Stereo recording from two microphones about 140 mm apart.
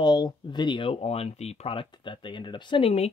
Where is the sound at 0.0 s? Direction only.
30° left (ahead or behind).